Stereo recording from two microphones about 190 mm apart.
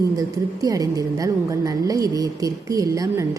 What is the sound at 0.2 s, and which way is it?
A woman's voice, 20° right (ahead or behind).